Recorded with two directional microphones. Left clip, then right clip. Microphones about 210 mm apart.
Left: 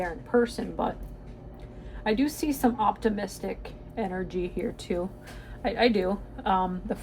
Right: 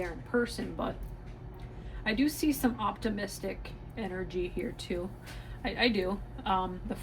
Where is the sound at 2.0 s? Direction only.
40° left (ahead or behind).